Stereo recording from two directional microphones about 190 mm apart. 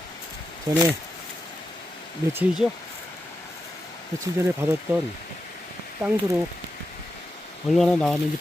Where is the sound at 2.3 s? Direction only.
Centre (ahead or behind).